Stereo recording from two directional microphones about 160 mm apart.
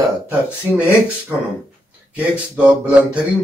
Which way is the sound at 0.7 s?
10° right (ahead or behind).